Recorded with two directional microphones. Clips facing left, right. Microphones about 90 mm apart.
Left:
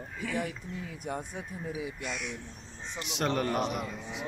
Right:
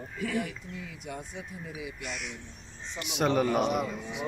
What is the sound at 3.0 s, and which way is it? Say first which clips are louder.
A man's voice: right 4 dB; 5° right (ahead or behind).